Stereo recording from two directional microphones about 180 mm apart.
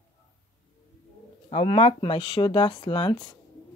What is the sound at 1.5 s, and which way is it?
Speech, 30° left (ahead or behind).